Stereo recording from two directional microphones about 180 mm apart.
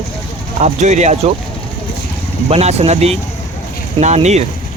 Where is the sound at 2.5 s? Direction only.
35° right (ahead or behind).